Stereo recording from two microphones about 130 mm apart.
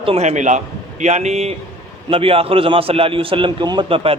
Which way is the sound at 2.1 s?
45° right (ahead or behind).